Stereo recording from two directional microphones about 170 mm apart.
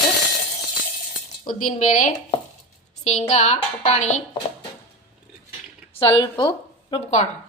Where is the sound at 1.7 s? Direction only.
45° left (ahead or behind).